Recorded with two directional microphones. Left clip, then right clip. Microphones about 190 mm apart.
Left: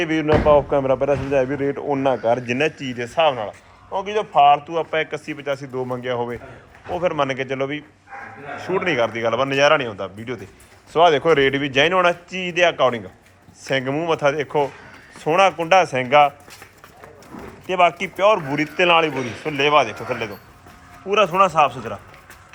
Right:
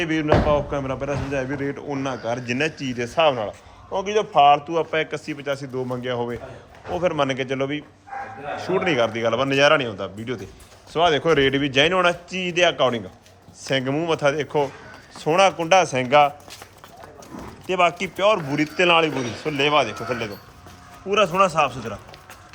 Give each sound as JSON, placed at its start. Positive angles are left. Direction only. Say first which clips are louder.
{"t": 0.0, "sound": "a man's voice", "louder": "left 2 dB", "side_deg": -5}
{"t": 2.8, "sound": "a man's voice", "louder": "right 2 dB", "side_deg": -20}
{"t": 17.7, "sound": "speech", "louder": "left 3 dB", "side_deg": -15}